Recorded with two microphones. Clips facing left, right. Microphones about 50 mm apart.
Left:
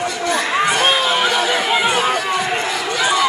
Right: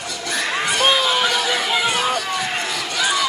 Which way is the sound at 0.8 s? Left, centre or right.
Centre.